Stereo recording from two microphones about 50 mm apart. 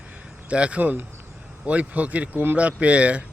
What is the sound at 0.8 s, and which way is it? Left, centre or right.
Speech, right.